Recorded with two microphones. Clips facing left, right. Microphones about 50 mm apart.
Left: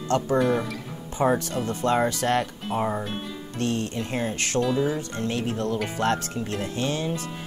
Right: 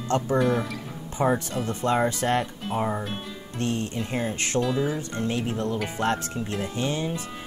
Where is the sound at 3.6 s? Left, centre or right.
Right.